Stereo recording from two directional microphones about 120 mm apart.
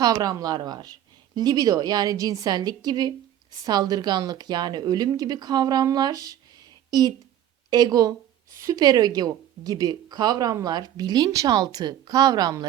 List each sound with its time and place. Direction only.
0.0 s a woman's voice: 30° right (ahead or behind)
7.7 s a woman's voice: 35° right (ahead or behind)